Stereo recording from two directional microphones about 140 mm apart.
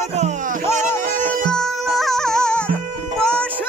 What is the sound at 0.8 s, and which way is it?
Music, 65° right (ahead or behind).